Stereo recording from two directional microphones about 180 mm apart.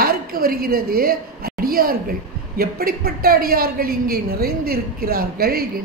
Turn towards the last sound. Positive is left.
turn(degrees=-55)  # may be behind; listen again after turning